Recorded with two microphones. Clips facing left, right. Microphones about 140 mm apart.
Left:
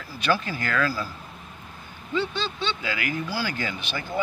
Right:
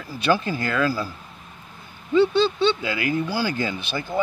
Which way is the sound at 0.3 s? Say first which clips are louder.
Right 3 dB; 25° right (ahead or behind).